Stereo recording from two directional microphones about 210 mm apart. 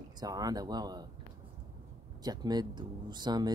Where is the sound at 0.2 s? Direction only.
15° right (ahead or behind).